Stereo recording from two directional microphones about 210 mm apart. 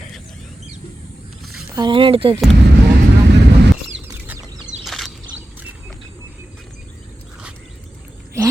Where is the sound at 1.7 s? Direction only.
20° right (ahead or behind).